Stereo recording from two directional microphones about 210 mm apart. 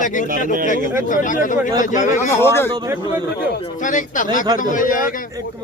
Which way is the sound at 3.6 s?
35° left (ahead or behind).